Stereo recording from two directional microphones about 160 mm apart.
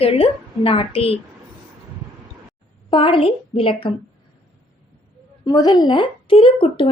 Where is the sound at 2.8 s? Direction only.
30° left (ahead or behind).